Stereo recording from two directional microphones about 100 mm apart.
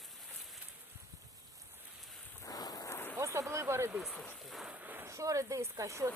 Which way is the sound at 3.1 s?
30° right (ahead or behind).